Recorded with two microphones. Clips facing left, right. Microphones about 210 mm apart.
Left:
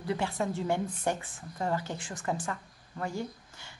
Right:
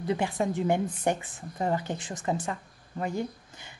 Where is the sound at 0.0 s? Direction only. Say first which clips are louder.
Right 3 dB; 20° right (ahead or behind).